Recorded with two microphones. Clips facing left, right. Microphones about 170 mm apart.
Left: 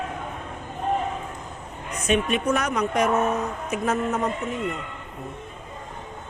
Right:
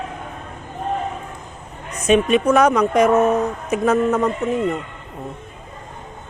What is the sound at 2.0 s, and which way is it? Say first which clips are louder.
Speech: right 7 dB; 90° right.